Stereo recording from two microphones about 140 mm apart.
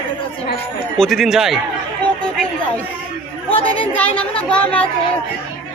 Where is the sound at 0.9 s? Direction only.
Centre (ahead or behind).